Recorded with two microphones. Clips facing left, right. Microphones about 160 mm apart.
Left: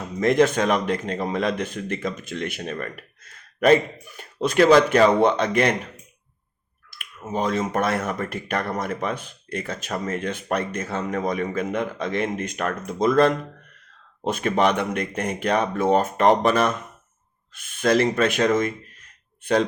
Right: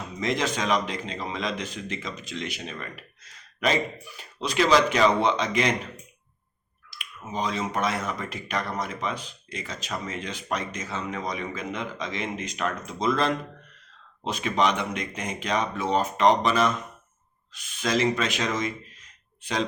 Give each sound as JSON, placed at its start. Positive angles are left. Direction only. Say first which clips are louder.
{"t": 0.2, "sound": "speech", "louder": "left 9 dB", "side_deg": 55}
{"t": 6.9, "sound": "speech", "louder": "left 5 dB", "side_deg": 55}